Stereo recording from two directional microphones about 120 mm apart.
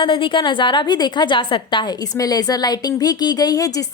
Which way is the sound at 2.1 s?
30° left (ahead or behind).